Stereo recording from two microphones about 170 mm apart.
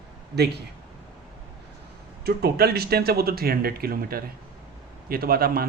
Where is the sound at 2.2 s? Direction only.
70° right (ahead or behind).